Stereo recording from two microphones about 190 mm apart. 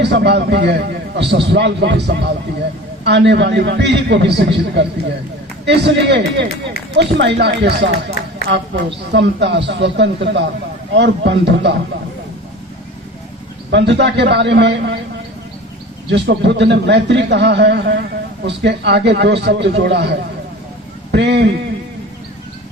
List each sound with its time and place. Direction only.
0.0 s a man's voice: 60° right (ahead or behind)
13.7 s a man's voice: 65° right (ahead or behind)
16.1 s a man's voice: 65° right (ahead or behind)